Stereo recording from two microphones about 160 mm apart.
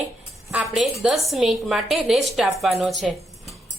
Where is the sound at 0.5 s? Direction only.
Centre (ahead or behind).